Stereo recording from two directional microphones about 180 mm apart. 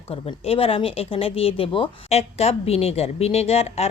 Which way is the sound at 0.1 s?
30° left (ahead or behind).